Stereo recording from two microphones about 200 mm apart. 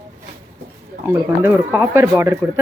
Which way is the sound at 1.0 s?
10° right (ahead or behind).